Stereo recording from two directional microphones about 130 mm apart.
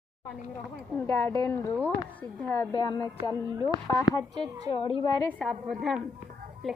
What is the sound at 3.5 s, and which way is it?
Speech, 25° right (ahead or behind).